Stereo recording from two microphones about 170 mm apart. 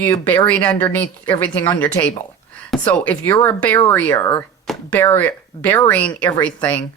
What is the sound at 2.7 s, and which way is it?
Speech, 10° left (ahead or behind).